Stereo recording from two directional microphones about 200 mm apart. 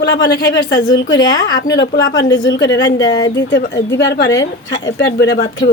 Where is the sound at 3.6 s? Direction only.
55° left (ahead or behind).